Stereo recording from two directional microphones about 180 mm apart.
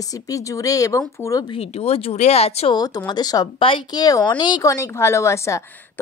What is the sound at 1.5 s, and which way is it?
Speech, 35° left (ahead or behind).